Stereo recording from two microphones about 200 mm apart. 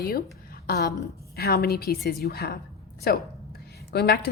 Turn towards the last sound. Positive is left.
turn(degrees=55)  # may be behind; listen again after turning